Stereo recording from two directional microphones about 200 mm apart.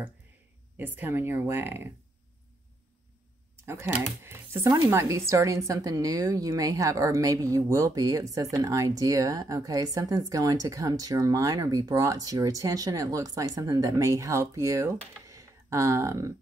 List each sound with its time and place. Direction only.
0.7 s speech: 10° right (ahead or behind)
3.6 s speech: 10° right (ahead or behind)